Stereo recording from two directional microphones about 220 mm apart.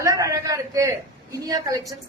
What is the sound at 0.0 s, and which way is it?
A man's voice, 15° right (ahead or behind).